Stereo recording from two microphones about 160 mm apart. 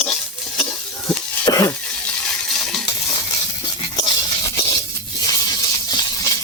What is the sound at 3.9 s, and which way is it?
Stir, 25° left (ahead or behind).